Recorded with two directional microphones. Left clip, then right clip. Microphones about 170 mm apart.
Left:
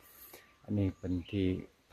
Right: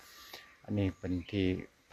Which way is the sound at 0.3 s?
20° left (ahead or behind).